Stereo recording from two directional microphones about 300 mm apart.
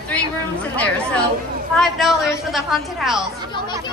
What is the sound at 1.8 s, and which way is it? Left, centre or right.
A woman's voice, centre.